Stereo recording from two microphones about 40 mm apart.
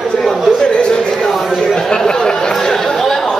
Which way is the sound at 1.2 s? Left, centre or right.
Centre.